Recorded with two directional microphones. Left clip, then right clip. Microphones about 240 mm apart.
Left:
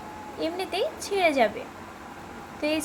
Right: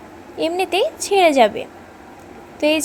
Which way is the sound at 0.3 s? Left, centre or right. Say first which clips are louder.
Right 10 dB; right.